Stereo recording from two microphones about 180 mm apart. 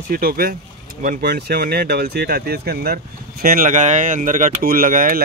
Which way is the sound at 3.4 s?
50° right (ahead or behind).